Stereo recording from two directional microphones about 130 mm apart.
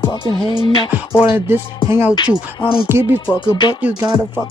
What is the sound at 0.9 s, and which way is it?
Music, 15° right (ahead or behind).